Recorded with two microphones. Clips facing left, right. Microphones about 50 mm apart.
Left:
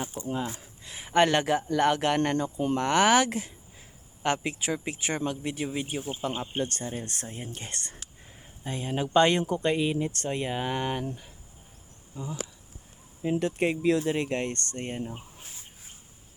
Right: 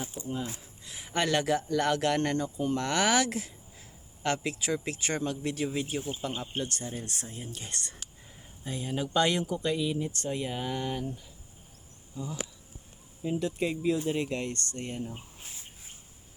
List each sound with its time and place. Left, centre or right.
0.2 s speech: centre
0.9 s speech: left
4.7 s speech: centre
6.6 s speech: left
12.1 s speech: left
13.2 s speech: left
14.2 s speech: left